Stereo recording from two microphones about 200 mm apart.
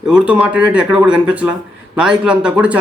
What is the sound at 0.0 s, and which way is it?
A man's voice, 5° right (ahead or behind).